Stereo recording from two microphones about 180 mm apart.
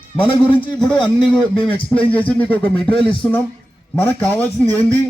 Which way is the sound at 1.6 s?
10° left (ahead or behind).